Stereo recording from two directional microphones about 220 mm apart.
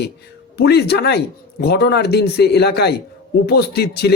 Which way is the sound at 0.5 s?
45° left (ahead or behind).